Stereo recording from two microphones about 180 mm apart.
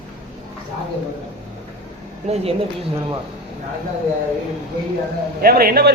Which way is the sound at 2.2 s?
35° right (ahead or behind).